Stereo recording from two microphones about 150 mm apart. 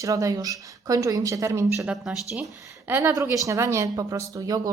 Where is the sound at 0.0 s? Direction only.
20° right (ahead or behind).